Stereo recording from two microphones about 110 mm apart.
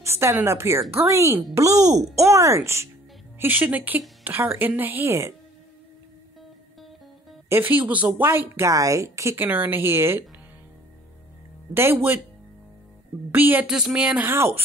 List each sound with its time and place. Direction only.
0.0 s a woman's voice: 25° right (ahead or behind)
7.4 s a woman's voice: 20° right (ahead or behind)
11.7 s a woman's voice: 20° right (ahead or behind)
13.3 s speech: 15° right (ahead or behind)
13.7 s speech: 5° right (ahead or behind)